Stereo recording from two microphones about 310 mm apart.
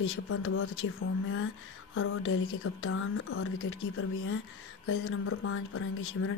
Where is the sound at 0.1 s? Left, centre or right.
Left.